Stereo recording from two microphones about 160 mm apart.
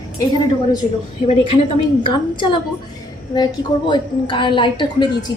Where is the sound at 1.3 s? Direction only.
35° left (ahead or behind).